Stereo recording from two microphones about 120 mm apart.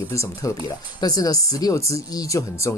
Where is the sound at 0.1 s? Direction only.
25° left (ahead or behind).